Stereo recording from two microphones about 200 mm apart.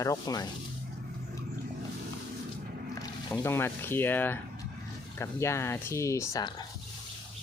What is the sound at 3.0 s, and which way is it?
Speech, 10° left (ahead or behind).